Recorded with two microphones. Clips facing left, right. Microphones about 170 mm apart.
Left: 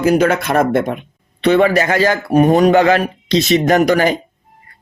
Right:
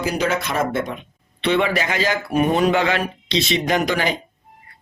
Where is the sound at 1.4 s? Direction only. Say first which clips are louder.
Left 7 dB; 45° left (ahead or behind).